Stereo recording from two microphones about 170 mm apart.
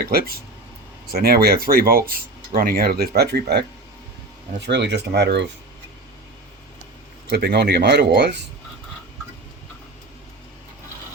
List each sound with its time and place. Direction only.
0.0 s speech: 65° right (ahead or behind)
4.6 s speech: 90° right
7.3 s speech: 70° right (ahead or behind); by 8.4 s 90° right